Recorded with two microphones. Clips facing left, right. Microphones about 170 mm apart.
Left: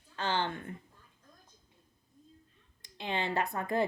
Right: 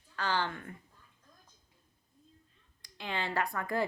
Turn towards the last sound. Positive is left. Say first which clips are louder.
# left 2 dB
turn(degrees=20)  # may be behind; listen again after turning